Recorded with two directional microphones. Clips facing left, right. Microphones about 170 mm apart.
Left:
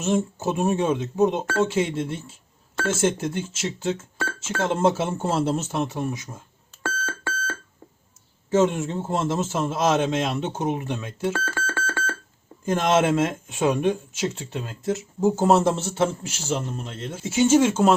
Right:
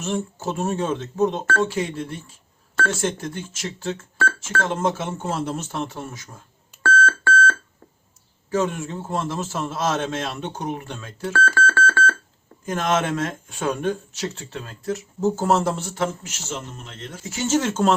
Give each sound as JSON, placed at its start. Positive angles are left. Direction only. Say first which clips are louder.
{"t": 0.0, "sound": "a man's voice", "louder": "left 3 dB", "side_deg": 20}
{"t": 6.8, "sound": "beep", "louder": "right 9 dB", "side_deg": 15}
{"t": 8.4, "sound": "a man's voice", "louder": "left 3 dB", "side_deg": 25}
{"t": 12.7, "sound": "a man's voice", "louder": "left 3 dB", "side_deg": 25}